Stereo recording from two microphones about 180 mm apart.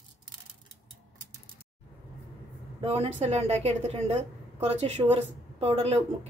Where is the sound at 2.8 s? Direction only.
35° right (ahead or behind).